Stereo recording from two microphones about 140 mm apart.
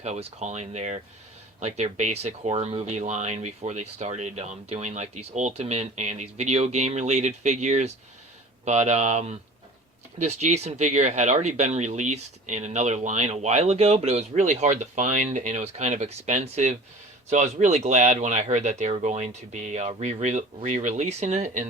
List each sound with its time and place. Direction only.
0.0 s speech: 50° right (ahead or behind)